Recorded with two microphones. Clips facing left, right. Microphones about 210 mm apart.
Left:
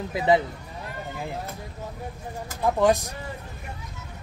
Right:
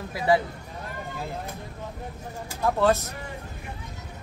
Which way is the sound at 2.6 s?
15° left (ahead or behind).